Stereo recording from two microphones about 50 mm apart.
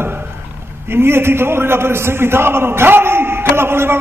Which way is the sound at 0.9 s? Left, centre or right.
Right.